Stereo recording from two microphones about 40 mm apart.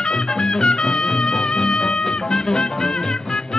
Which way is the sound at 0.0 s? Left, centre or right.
Left.